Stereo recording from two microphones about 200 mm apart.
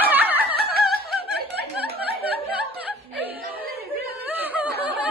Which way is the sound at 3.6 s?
50° right (ahead or behind).